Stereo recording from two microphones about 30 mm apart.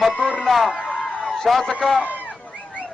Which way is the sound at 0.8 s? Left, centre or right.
Left.